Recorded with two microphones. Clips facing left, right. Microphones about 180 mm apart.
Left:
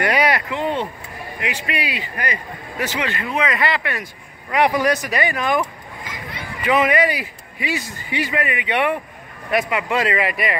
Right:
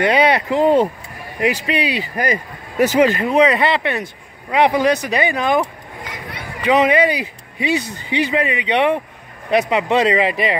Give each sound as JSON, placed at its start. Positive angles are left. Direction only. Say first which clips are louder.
{"t": 0.0, "sound": "speech", "louder": "right 4 dB", "side_deg": -25}
{"t": 0.6, "sound": "a man's voice", "louder": "right 9 dB", "side_deg": -40}